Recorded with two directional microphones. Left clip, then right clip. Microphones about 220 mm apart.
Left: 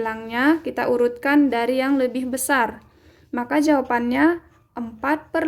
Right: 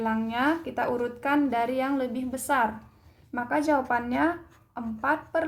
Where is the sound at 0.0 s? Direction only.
40° left (ahead or behind).